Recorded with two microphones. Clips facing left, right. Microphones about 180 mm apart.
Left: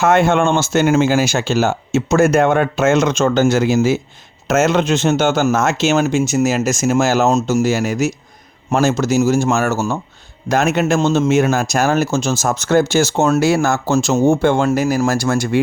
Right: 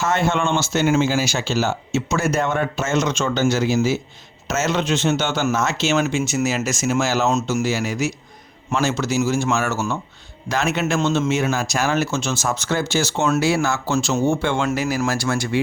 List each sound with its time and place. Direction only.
0.0 s a man's voice: 55° left (ahead or behind)